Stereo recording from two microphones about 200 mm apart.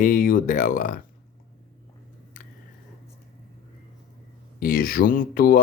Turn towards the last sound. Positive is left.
turn(degrees=45)  # may be behind; listen again after turning